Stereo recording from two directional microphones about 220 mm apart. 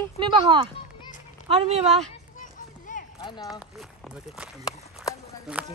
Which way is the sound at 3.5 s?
Centre (ahead or behind).